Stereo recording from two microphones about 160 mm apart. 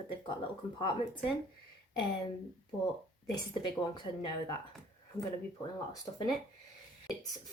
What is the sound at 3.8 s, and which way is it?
Speech, 25° left (ahead or behind).